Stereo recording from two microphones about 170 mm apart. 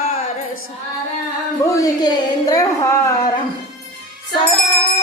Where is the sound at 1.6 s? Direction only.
20° left (ahead or behind).